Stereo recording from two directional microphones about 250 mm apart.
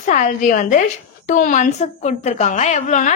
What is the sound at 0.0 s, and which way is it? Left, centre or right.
A woman's voice, left.